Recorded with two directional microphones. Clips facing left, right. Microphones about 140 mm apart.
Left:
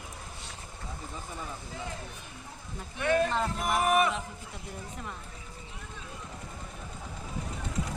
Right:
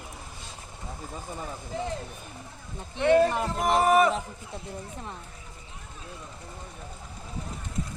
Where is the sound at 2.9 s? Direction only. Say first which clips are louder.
Right 6 dB; 25° right (ahead or behind).